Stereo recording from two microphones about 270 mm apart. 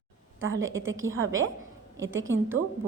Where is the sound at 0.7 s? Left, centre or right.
Right.